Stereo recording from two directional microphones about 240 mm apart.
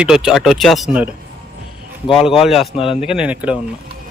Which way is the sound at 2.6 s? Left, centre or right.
Left.